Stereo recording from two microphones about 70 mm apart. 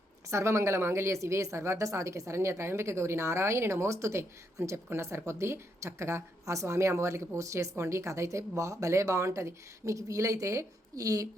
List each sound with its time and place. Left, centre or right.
0.3 s speech: right